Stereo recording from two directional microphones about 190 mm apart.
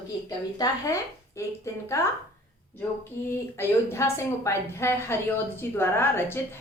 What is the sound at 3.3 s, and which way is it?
A woman's voice, 15° left (ahead or behind).